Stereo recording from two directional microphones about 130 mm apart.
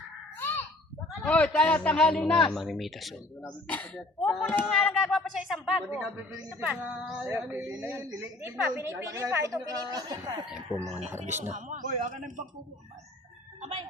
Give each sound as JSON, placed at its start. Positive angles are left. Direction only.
{"t": 0.3, "sound": "a sound", "side_deg": 15}
{"t": 1.2, "sound": "speech", "side_deg": 10}
{"t": 3.4, "sound": "speech", "side_deg": 10}
{"t": 4.4, "sound": "a woman's voice", "side_deg": 15}
{"t": 11.3, "sound": "speech", "side_deg": -15}
{"t": 11.5, "sound": "a man's voice", "side_deg": -70}